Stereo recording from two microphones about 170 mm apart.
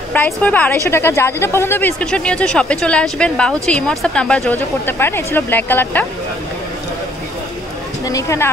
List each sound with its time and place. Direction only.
0.1 s speech: 10° left (ahead or behind)
8.0 s speech: 20° left (ahead or behind)